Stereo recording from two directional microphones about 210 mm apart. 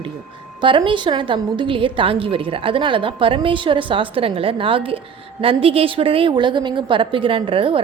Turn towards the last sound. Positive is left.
turn(degrees=-25)  # may be behind; listen again after turning